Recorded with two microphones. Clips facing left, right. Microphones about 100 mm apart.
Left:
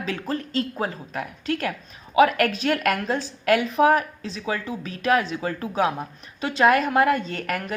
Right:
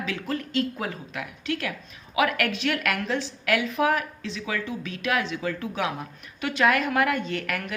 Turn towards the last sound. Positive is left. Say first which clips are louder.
# left 1 dB
turn(degrees=40)  # may be behind; listen again after turning